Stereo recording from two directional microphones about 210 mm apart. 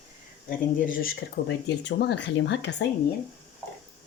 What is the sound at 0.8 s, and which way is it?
Speech, 40° left (ahead or behind).